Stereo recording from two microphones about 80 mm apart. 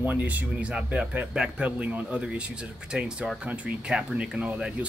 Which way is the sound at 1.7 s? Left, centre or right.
Right.